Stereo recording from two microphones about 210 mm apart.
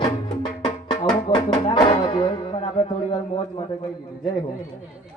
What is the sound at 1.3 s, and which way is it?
Music, 20° left (ahead or behind).